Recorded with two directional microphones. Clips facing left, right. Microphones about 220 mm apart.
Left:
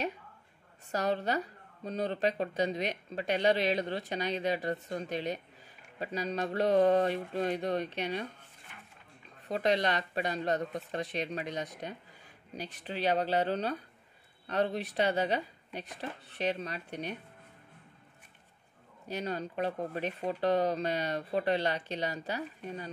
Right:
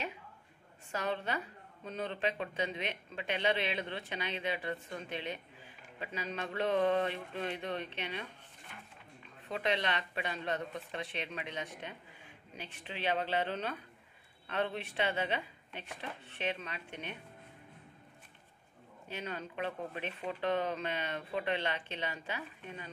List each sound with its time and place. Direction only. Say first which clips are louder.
0.9 s a woman's voice: left 5 dB; 40° left (ahead or behind)
9.5 s a woman's voice: left 5 dB; 40° left (ahead or behind)
19.0 s a woman's voice: left 6 dB; 40° left (ahead or behind)